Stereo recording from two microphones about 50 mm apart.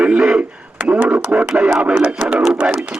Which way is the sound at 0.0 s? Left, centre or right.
Centre.